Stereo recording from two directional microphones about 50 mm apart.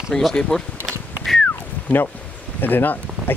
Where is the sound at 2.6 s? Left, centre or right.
Left.